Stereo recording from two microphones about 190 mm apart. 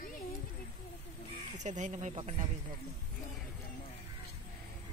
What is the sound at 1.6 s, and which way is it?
Speech, 40° right (ahead or behind).